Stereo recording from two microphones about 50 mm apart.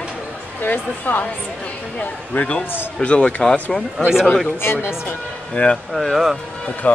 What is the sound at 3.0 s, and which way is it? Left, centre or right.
Speech, centre.